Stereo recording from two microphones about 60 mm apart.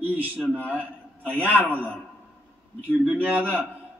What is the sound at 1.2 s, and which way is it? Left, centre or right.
Speech, right.